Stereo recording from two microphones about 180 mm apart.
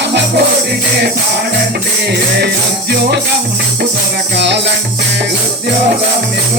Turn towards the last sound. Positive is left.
turn(degrees=-75)  # may be behind; listen again after turning